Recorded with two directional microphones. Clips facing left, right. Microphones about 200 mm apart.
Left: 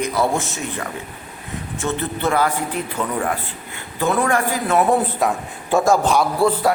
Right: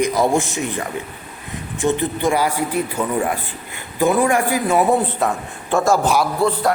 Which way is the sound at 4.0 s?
15° right (ahead or behind).